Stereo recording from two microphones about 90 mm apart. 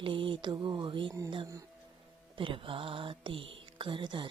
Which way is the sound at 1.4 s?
40° right (ahead or behind).